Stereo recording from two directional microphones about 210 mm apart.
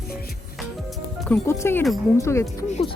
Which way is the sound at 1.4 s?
15° left (ahead or behind).